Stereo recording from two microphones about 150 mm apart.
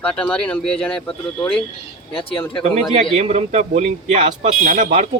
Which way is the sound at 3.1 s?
50° right (ahead or behind).